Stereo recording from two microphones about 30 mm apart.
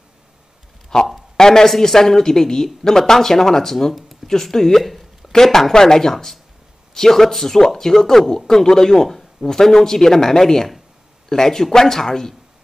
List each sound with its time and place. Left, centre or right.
0.9 s speech: centre